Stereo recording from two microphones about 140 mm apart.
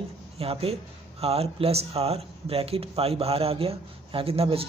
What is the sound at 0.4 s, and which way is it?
Speech, 45° right (ahead or behind).